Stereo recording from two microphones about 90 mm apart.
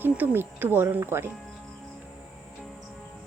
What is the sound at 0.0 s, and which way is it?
A woman's voice, 20° right (ahead or behind).